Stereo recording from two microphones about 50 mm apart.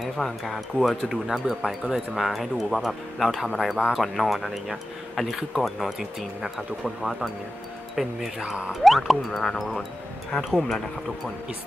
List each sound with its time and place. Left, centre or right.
0.0 s speech: centre
8.4 s speech: right
8.8 s speech: centre